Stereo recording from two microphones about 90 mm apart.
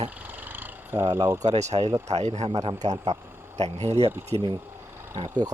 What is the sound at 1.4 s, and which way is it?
Speech, 45° right (ahead or behind).